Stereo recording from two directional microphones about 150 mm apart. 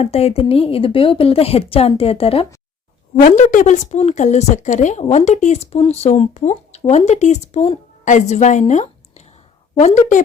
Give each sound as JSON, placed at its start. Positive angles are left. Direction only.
{"t": 0.0, "sound": "speech", "side_deg": 45}
{"t": 3.5, "sound": "speech", "side_deg": 55}